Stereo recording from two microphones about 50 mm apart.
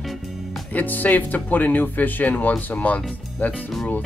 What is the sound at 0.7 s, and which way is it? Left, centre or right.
Speech, left.